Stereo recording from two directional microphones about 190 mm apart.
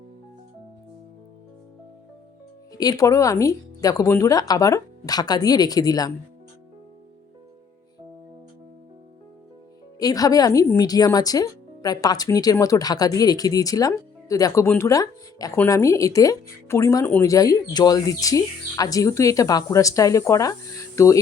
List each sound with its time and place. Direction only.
2.7 s speech: 20° left (ahead or behind)
10.0 s speech: 20° left (ahead or behind)